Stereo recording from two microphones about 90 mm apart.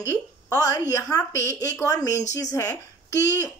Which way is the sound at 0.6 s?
40° left (ahead or behind).